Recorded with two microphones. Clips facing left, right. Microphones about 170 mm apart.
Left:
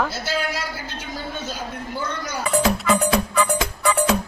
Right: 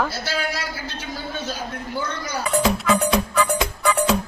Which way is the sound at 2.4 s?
Centre (ahead or behind).